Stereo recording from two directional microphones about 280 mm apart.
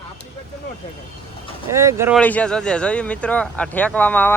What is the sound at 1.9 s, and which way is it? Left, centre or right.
Speech, centre.